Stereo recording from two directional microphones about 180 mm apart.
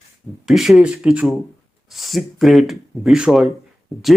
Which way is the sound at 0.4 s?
Centre (ahead or behind).